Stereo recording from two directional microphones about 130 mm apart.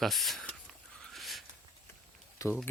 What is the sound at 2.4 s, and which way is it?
Speech, 25° left (ahead or behind).